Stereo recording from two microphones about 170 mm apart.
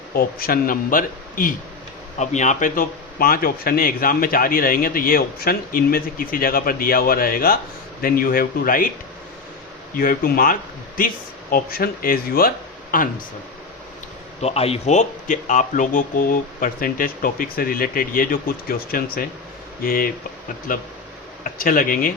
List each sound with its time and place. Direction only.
0.1 s speech: 60° left (ahead or behind)
2.1 s speech: 45° left (ahead or behind)
9.9 s speech: 55° left (ahead or behind)
14.4 s speech: 35° left (ahead or behind); by 22.1 s 55° left (ahead or behind)